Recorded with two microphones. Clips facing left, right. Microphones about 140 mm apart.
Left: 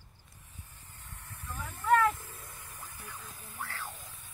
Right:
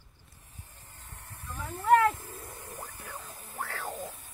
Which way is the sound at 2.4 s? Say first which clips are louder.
Right 6 dB; 55° right (ahead or behind).